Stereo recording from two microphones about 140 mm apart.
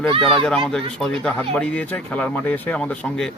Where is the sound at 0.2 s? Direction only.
Centre (ahead or behind).